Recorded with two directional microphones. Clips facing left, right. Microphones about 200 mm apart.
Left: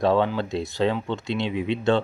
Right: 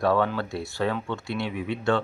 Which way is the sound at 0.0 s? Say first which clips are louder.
Left 2 dB; 20° left (ahead or behind).